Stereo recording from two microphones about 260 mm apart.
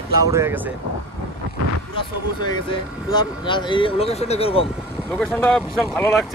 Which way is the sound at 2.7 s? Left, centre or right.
Centre.